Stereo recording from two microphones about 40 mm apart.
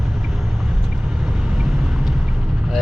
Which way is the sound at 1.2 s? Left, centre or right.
Centre.